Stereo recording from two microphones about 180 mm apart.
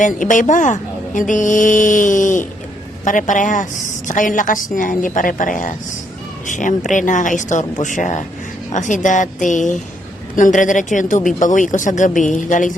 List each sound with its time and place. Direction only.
0.0 s a woman's voice: 45° left (ahead or behind)